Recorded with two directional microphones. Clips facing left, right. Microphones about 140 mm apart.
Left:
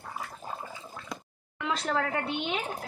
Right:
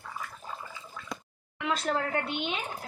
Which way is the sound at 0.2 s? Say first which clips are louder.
Left 2 dB; 35° left (ahead or behind).